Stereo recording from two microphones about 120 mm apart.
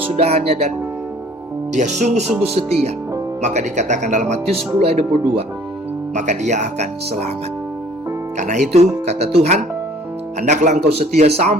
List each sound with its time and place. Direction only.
0.2 s speech: 60° right (ahead or behind)
1.7 s speech: 80° right
2.4 s speech: 60° right (ahead or behind)
3.4 s speech: 80° right; by 5.5 s 55° right (ahead or behind)
6.1 s speech: 80° right
8.4 s speech: 85° right
8.7 s speech: 60° right (ahead or behind)
10.4 s speech: 85° right; by 11.5 s 65° right (ahead or behind)